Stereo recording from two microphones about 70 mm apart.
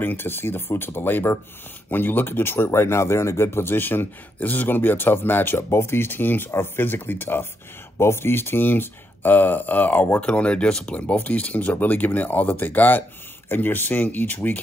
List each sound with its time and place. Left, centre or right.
0.0 s speech: left
10.2 s speech: centre